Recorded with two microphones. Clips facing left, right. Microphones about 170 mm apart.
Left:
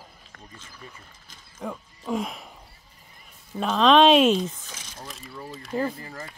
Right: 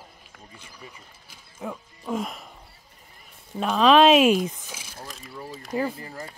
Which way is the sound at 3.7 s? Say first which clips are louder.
Right 1 dB; 5° right (ahead or behind).